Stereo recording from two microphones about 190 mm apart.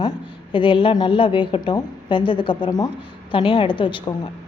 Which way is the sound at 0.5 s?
25° left (ahead or behind).